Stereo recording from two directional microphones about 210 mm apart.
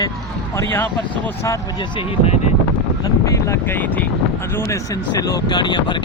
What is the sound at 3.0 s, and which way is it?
Boat, 15° left (ahead or behind).